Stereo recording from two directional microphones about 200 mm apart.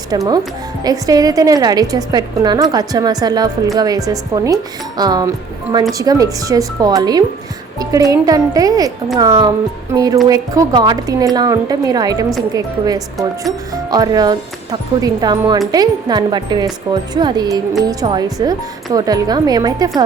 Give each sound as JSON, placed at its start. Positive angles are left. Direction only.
{"t": 0.1, "sound": "a woman's voice", "side_deg": -20}